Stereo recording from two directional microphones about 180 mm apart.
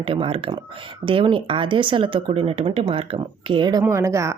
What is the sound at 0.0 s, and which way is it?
Speech, 30° right (ahead or behind).